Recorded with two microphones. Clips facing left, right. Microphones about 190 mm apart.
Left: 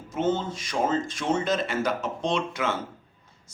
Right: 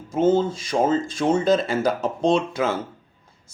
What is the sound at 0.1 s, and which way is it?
Speech, 30° right (ahead or behind).